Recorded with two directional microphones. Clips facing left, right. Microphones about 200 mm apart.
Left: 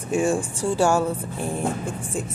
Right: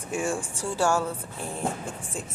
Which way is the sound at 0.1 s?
20° left (ahead or behind).